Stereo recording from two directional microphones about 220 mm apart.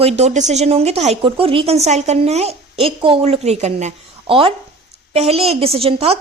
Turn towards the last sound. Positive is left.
turn(degrees=-25)  # may be behind; listen again after turning